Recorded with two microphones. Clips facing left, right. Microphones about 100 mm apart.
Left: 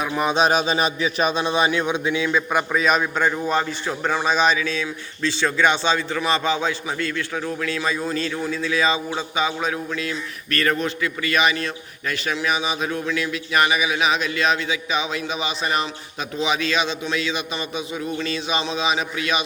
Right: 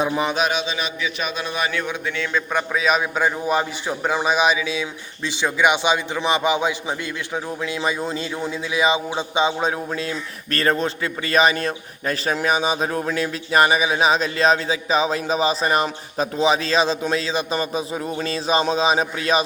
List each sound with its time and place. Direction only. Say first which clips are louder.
0.3 s a man's voice: left 4 dB; 35° left (ahead or behind)
1.4 s a man's voice: left 4 dB; 25° left (ahead or behind); by 19.4 s 35° right (ahead or behind)